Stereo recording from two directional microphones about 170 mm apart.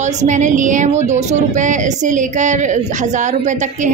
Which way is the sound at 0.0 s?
45° right (ahead or behind).